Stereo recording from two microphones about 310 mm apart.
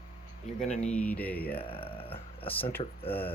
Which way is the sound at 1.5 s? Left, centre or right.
Centre.